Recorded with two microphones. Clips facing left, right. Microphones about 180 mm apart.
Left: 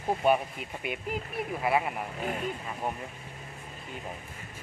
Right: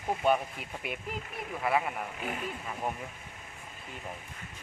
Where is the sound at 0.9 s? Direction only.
Centre (ahead or behind).